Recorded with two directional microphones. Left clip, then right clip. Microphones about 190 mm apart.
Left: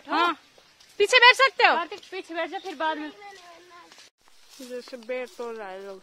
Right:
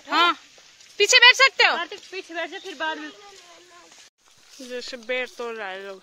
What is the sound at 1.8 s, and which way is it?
Speech, 55° left (ahead or behind).